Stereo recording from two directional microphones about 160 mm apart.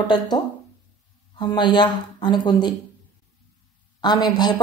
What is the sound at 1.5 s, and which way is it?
Speech, 30° left (ahead or behind).